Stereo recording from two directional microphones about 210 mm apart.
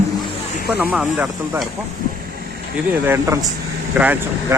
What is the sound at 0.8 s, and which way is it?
Speech, 5° right (ahead or behind).